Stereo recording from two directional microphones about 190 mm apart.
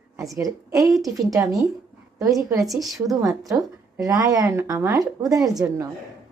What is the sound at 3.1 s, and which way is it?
A woman's voice, 15° right (ahead or behind).